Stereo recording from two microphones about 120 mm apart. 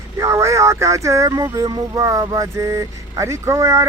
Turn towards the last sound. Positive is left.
turn(degrees=-25)  # may be behind; listen again after turning